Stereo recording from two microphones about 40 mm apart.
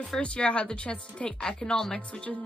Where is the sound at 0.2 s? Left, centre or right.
Left.